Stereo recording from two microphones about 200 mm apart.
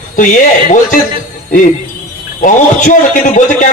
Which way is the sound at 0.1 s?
40° left (ahead or behind).